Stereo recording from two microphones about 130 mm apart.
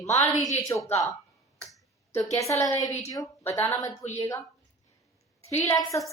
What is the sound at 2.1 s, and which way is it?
A woman's voice, 25° left (ahead or behind).